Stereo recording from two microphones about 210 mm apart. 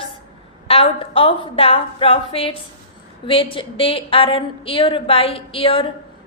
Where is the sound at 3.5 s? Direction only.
25° left (ahead or behind).